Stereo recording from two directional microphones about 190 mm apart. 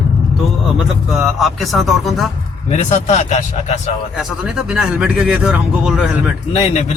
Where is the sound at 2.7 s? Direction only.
35° left (ahead or behind).